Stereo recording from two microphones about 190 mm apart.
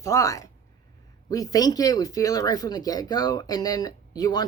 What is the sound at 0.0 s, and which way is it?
Speech, 15° left (ahead or behind).